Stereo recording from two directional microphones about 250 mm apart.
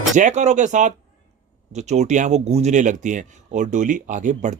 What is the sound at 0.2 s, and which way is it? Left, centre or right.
Speech, right.